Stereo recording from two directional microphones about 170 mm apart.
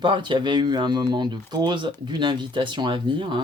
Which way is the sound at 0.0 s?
30° right (ahead or behind).